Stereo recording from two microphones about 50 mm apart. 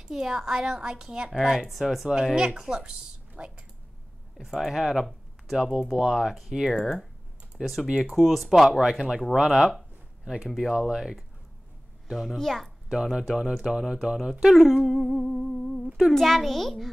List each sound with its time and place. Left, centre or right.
0.1 s speech: centre
1.4 s a child's voice: centre
2.3 s speech: centre
4.4 s speech: centre
5.6 s a child's voice: centre
12.1 s a child's voice: centre
12.9 s a child's voice: centre